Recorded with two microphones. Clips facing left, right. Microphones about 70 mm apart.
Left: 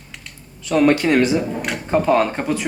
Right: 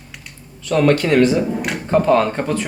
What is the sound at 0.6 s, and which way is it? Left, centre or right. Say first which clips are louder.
Speech: even; centre.